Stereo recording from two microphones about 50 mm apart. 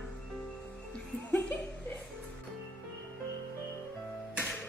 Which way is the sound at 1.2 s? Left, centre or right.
Left.